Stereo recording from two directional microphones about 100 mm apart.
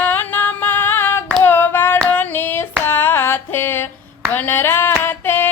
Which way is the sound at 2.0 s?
20° left (ahead or behind).